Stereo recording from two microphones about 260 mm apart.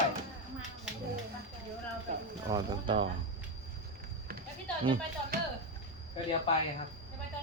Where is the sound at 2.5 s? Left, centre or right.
Centre.